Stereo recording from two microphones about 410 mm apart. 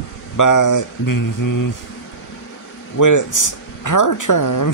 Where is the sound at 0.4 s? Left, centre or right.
Left.